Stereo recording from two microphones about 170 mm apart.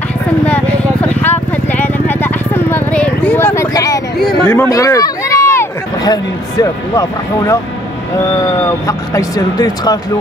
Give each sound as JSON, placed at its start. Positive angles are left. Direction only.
{"t": 0.5, "sound": "vehicle", "side_deg": 10}
{"t": 4.5, "sound": "speech", "side_deg": 15}
{"t": 8.8, "sound": "speech", "side_deg": 20}